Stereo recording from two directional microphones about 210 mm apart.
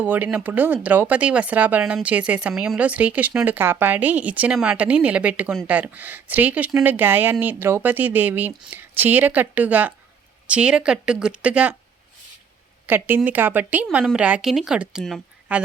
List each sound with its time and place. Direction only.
0.0 s a woman's voice: 10° right (ahead or behind)
12.8 s a woman's voice: 10° right (ahead or behind)